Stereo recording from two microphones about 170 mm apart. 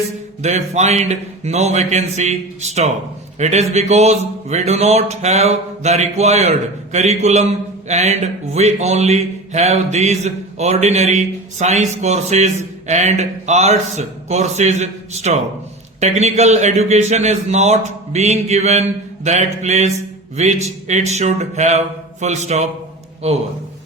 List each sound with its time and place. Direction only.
0.4 s a man's voice: 40° right (ahead or behind)